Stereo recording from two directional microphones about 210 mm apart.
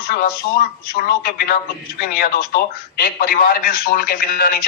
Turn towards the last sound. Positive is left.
turn(degrees=45)  # may be behind; listen again after turning